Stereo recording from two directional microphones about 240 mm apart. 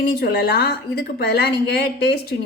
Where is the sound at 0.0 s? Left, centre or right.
Left.